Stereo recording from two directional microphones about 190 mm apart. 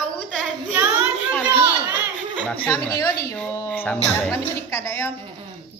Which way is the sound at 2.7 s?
15° left (ahead or behind).